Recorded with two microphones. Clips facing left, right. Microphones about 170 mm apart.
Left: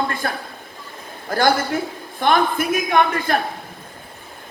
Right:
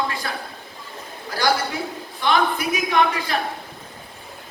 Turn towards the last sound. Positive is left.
turn(degrees=50)  # may be behind; listen again after turning